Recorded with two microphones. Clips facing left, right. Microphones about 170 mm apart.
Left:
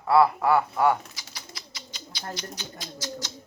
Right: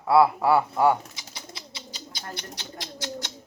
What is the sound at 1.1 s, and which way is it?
Bird, 25° right (ahead or behind).